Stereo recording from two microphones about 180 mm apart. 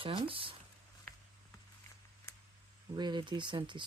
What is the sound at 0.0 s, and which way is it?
Speech, 30° right (ahead or behind).